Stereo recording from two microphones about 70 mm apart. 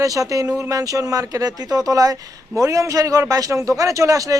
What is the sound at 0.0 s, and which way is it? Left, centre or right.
Speech, right.